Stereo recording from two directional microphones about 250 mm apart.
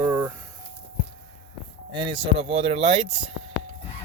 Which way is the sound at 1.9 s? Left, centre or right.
Centre.